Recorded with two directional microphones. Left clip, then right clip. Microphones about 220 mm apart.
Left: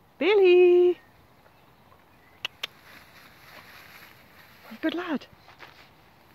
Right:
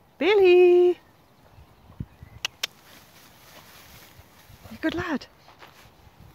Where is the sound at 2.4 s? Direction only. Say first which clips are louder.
Right 3 dB; 5° right (ahead or behind).